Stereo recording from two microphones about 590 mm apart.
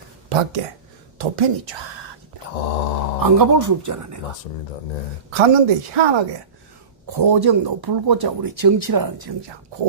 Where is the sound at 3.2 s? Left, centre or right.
Right.